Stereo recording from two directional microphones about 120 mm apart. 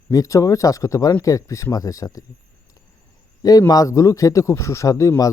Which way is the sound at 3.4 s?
30° left (ahead or behind).